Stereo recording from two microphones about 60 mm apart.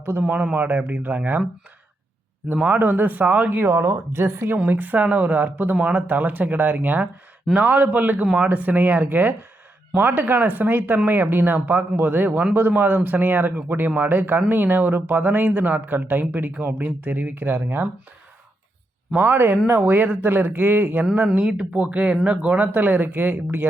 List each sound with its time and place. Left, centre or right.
0.0 s speech: right
2.6 s a woman's voice: right
4.5 s speech: right
19.2 s speech: right
21.6 s speech: right